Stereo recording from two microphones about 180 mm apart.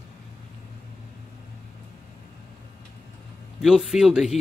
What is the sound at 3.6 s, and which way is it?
Speech, centre (ahead or behind).